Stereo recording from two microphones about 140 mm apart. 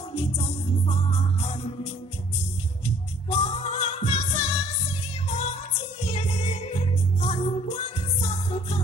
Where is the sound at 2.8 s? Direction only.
45° left (ahead or behind).